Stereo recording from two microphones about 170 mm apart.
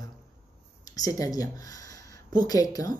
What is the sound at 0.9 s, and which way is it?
Speech, 20° left (ahead or behind).